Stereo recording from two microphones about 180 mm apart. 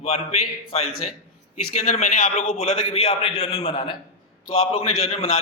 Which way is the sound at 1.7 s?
40° left (ahead or behind).